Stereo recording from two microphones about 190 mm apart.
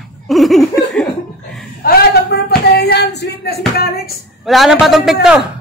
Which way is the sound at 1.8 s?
55° left (ahead or behind).